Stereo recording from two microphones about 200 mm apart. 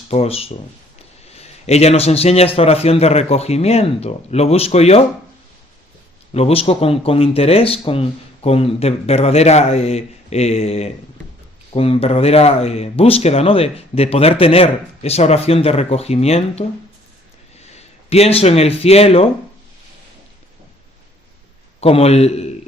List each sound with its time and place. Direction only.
0.1 s a man's voice: 30° left (ahead or behind)
6.3 s speech: 30° left (ahead or behind)
18.1 s speech: 30° left (ahead or behind)
21.8 s speech: 30° left (ahead or behind)